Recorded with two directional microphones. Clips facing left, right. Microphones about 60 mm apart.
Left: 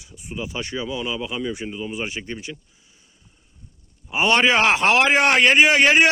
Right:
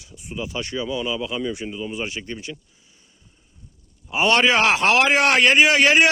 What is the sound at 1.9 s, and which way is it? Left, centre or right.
Speech, left.